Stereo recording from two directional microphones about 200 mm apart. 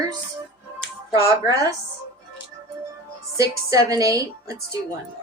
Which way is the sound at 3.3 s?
15° right (ahead or behind).